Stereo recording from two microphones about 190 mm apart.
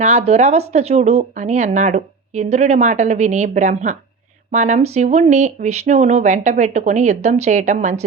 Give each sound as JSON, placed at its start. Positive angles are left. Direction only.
{"t": 0.0, "sound": "speech", "side_deg": -35}